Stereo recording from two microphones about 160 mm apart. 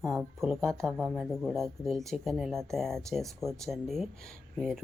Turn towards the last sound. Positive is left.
turn(degrees=5)  # may be behind; listen again after turning